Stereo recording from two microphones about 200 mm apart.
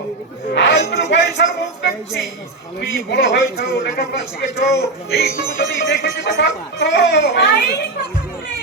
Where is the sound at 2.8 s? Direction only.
60° left (ahead or behind).